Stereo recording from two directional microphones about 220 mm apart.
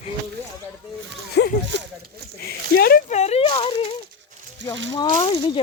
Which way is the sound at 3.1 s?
30° left (ahead or behind).